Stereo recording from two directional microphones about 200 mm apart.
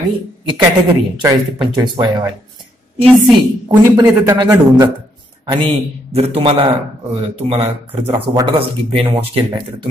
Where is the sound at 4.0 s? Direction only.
20° right (ahead or behind).